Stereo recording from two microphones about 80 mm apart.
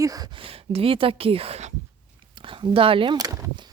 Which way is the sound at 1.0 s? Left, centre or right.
Right.